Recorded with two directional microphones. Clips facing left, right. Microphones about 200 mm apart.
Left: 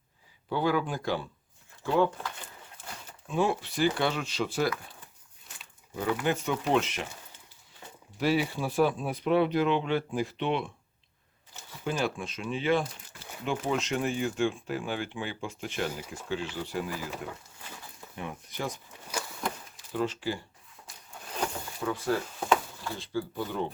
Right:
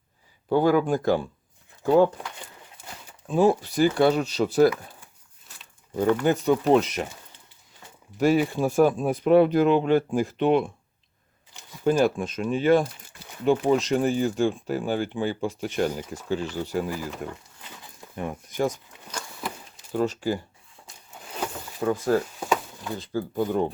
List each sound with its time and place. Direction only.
0.4 s speech: 45° right (ahead or behind)
3.2 s speech: 35° right (ahead or behind)
6.0 s speech: 40° right (ahead or behind)
8.2 s speech: 45° right (ahead or behind)
11.9 s speech: 45° right (ahead or behind)
18.2 s speech: 45° right (ahead or behind)
19.4 s a sound: 5° right (ahead or behind)
19.9 s speech: 45° right (ahead or behind)
21.8 s speech: 45° right (ahead or behind)